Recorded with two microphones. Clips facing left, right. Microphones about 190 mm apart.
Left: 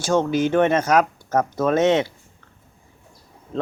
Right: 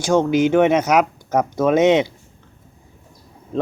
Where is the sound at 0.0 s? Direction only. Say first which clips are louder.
Right 3 dB; 15° right (ahead or behind).